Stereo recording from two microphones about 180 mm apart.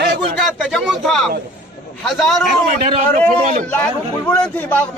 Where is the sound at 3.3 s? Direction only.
40° right (ahead or behind).